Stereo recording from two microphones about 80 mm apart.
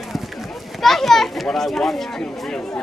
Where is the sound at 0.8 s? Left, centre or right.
Centre.